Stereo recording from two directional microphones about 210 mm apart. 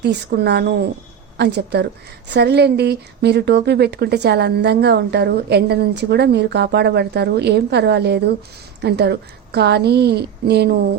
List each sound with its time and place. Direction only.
0.3 s a woman's voice: 50° right (ahead or behind)